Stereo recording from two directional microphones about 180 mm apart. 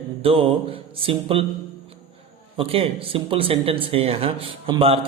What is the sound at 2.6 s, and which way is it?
A man's voice, 30° right (ahead or behind).